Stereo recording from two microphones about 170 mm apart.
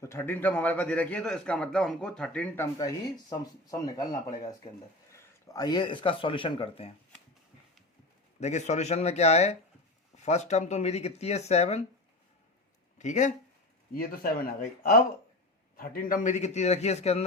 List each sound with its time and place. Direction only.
0.0 s a man's voice: 15° left (ahead or behind)
2.7 s speech: 20° left (ahead or behind)
5.5 s speech: 25° left (ahead or behind)
8.4 s speech: 40° left (ahead or behind)
13.0 s speech: 45° left (ahead or behind)
13.9 s speech: 55° left (ahead or behind); by 17.2 s 40° left (ahead or behind)